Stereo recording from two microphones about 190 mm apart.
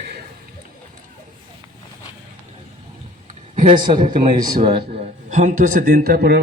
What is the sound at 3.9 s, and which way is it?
A man's voice, 25° right (ahead or behind).